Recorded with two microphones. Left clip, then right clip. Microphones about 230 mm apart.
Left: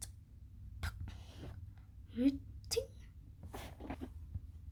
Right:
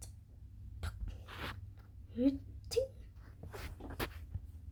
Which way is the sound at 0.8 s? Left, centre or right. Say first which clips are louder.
Left 3 dB; centre.